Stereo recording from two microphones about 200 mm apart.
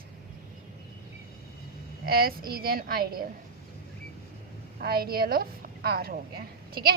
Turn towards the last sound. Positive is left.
turn(degrees=-50)  # may be behind; listen again after turning